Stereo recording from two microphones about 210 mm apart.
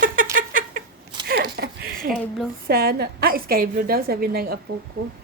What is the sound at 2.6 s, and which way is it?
A woman's voice, 45° right (ahead or behind).